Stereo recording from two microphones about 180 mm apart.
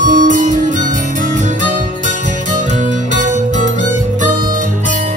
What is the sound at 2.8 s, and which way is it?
Music, 45° right (ahead or behind).